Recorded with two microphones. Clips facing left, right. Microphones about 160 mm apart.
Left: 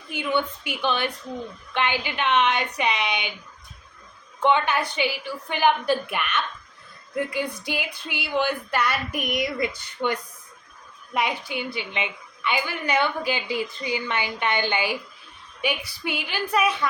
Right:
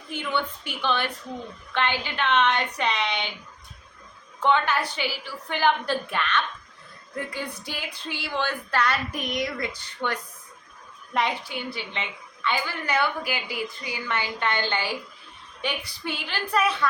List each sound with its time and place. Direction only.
0.1 s a woman's voice: 15° left (ahead or behind)
4.4 s a woman's voice: 15° left (ahead or behind)